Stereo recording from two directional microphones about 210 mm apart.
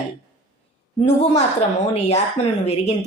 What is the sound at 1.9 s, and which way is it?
Speech, 30° left (ahead or behind).